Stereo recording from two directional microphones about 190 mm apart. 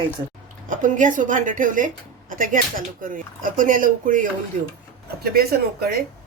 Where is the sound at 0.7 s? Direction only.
45° right (ahead or behind).